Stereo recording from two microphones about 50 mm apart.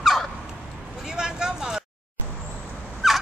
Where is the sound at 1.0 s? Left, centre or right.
Centre.